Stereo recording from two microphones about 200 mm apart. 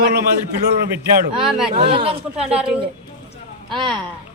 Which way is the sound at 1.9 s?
30° right (ahead or behind).